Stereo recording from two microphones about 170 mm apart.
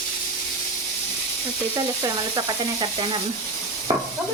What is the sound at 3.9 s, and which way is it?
Speech, 25° right (ahead or behind).